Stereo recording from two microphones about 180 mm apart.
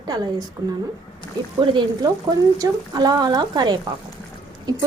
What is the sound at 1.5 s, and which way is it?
Speech, 25° right (ahead or behind).